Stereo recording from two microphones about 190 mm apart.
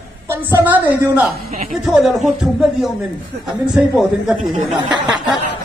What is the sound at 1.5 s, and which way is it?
Speech, 35° right (ahead or behind).